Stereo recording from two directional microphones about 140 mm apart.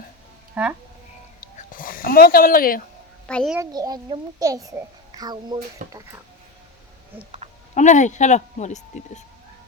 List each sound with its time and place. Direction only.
0.6 s speech: 10° right (ahead or behind)
1.4 s a sound: 85° left
3.2 s a child's voice: 5° left (ahead or behind)
3.6 s a child's voice: 30° right (ahead or behind)
5.8 s speech: 65° right (ahead or behind)
7.3 s a sound: 45° right (ahead or behind)
7.8 s speech: 60° left (ahead or behind)